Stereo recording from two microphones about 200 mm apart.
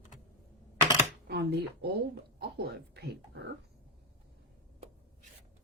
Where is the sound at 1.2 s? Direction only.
55° right (ahead or behind).